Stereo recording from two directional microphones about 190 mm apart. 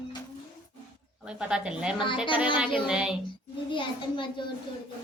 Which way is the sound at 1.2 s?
5° right (ahead or behind).